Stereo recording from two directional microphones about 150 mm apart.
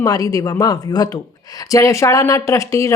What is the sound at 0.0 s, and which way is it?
Speech, 25° left (ahead or behind).